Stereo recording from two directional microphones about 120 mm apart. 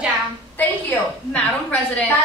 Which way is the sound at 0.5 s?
15° left (ahead or behind).